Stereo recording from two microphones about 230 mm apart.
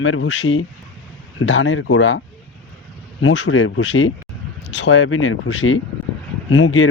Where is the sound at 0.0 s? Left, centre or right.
Left.